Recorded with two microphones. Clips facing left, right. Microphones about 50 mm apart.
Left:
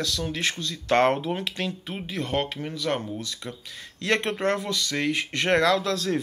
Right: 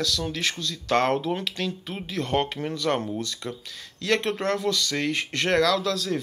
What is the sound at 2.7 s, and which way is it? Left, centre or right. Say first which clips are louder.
Speech: right 3 dB; centre.